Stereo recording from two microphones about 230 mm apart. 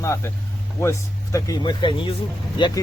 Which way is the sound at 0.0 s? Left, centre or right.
Centre.